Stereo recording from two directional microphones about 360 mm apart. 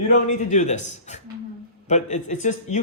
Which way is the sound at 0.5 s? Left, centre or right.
Centre.